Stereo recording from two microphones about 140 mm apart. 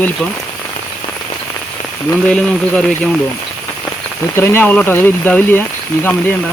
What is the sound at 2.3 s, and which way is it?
Speech, 5° left (ahead or behind).